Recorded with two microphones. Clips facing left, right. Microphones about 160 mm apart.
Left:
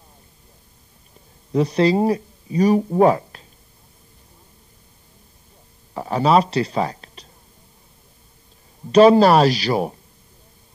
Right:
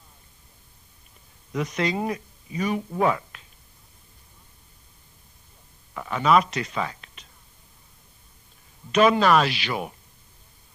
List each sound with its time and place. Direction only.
1.5 s speech: 30° left (ahead or behind)
5.9 s speech: 35° left (ahead or behind)
8.9 s speech: 35° left (ahead or behind)